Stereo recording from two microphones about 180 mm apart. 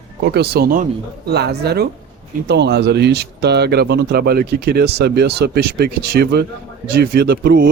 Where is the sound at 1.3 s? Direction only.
65° right (ahead or behind).